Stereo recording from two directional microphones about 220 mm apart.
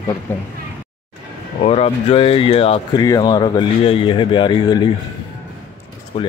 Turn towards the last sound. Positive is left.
turn(degrees=25)  # may be behind; listen again after turning